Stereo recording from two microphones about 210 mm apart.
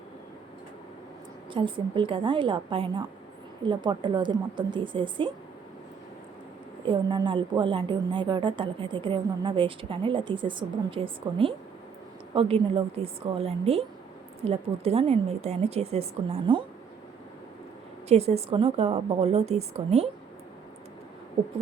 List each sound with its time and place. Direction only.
1.5 s a woman's voice: 25° right (ahead or behind)
6.8 s a woman's voice: 25° right (ahead or behind)
18.1 s a woman's voice: 30° right (ahead or behind)